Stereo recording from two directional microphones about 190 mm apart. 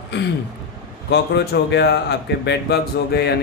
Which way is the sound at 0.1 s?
65° left (ahead or behind).